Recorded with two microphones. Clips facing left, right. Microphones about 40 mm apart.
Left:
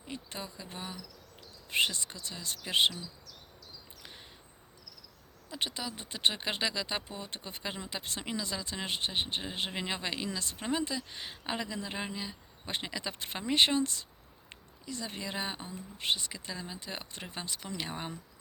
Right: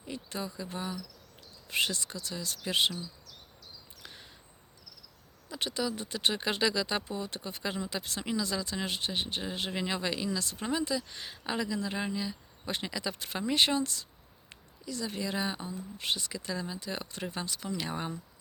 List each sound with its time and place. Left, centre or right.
0.1 s speech: centre
4.0 s a sound: centre
5.5 s speech: centre